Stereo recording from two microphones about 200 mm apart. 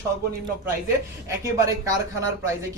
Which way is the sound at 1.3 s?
15° right (ahead or behind).